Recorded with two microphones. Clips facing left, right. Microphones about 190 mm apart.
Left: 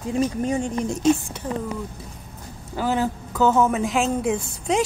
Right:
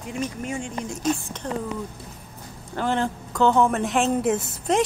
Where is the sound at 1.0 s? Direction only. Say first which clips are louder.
Left 5 dB; 10° left (ahead or behind).